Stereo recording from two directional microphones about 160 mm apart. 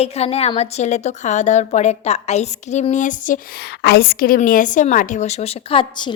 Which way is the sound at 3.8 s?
90° left.